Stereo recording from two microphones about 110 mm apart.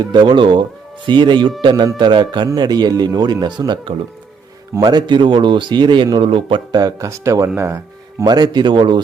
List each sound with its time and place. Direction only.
0.0 s a man's voice: 45° right (ahead or behind)
6.7 s speech: 35° right (ahead or behind)
8.2 s a man's voice: 40° right (ahead or behind)